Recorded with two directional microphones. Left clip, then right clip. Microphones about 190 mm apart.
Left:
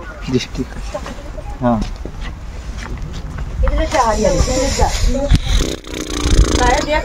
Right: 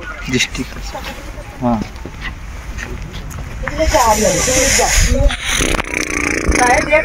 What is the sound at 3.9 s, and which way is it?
Speech, centre (ahead or behind).